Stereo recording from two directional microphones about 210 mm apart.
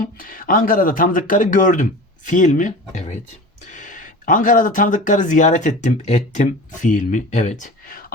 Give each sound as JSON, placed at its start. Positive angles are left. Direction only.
{"t": 0.0, "sound": "speech", "side_deg": 40}